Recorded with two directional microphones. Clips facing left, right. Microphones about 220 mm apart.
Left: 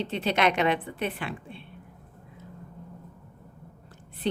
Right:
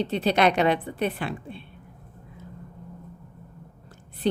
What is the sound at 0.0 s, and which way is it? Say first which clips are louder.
A woman's voice: right 4 dB; 35° right (ahead or behind).